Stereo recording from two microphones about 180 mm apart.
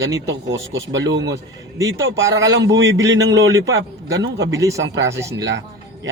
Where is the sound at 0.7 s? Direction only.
80° right.